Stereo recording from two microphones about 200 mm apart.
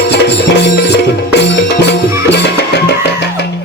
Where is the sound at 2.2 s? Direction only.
55° left (ahead or behind).